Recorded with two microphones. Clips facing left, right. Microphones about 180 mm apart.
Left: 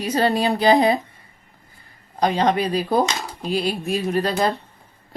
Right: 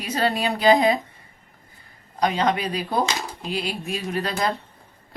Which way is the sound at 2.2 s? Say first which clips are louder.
Left 3 dB; 35° left (ahead or behind).